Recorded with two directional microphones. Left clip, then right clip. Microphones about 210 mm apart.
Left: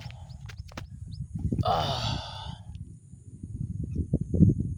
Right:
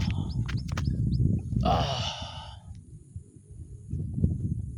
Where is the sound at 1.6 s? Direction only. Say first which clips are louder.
Even; 5° left (ahead or behind).